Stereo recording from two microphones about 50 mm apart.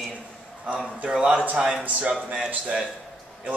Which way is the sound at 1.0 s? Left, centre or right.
Centre.